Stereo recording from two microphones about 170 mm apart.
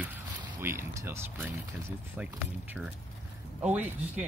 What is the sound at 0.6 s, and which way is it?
Speech, 15° right (ahead or behind).